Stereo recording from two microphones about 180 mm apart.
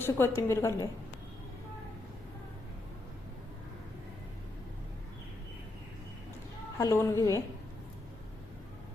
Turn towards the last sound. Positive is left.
turn(degrees=20)  # may be behind; listen again after turning